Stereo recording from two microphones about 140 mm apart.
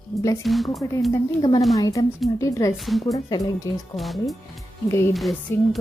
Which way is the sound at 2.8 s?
Centre (ahead or behind).